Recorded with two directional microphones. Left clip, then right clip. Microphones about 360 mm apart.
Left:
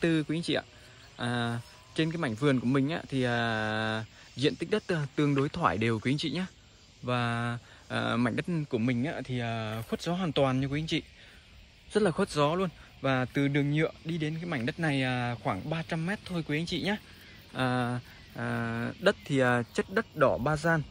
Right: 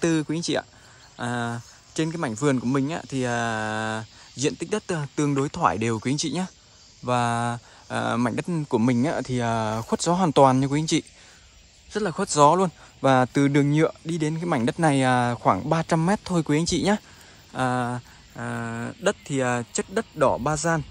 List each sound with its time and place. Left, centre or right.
0.0 s speech: centre
11.9 s speech: centre
17.5 s speech: centre